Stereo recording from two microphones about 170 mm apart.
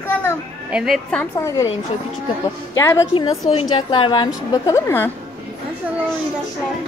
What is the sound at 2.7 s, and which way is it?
Speech, 15° left (ahead or behind).